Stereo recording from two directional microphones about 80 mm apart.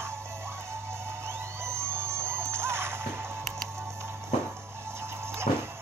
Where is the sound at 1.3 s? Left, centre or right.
Right.